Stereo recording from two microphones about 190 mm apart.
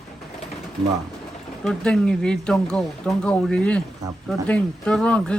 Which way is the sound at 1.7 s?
5° left (ahead or behind).